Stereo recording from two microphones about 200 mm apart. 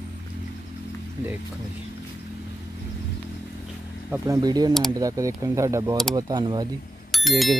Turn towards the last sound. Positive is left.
turn(degrees=0)  # may be behind; listen again after turning